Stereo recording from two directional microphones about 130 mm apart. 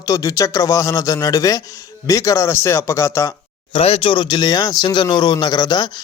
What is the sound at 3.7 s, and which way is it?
Speech, 45° left (ahead or behind).